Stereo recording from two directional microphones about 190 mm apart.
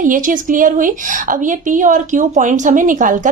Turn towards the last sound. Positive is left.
turn(degrees=-45)  # may be behind; listen again after turning